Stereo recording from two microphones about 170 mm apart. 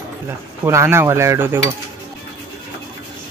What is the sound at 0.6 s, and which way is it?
Speech, 15° right (ahead or behind).